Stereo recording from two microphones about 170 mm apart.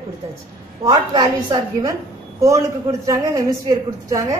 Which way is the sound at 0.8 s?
25° right (ahead or behind).